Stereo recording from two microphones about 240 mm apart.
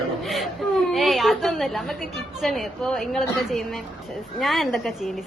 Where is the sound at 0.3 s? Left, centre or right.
Centre.